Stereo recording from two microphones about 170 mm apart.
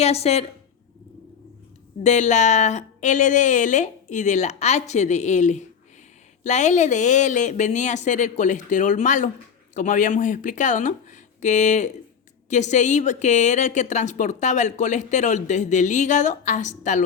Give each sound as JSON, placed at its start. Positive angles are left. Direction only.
{"t": 0.0, "sound": "a woman's voice", "side_deg": 35}
{"t": 2.0, "sound": "a woman's voice", "side_deg": 45}